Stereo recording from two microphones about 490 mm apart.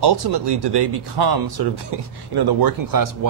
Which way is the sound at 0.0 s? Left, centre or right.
Right.